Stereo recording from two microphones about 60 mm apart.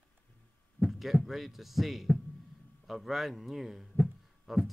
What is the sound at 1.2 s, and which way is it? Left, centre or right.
Speech, centre.